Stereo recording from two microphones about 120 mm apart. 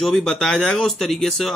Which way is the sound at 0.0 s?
5° left (ahead or behind).